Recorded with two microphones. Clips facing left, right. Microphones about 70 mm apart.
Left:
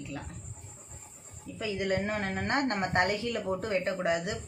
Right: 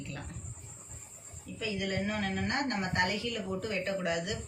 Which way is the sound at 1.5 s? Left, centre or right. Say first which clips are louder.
Left 4 dB; left.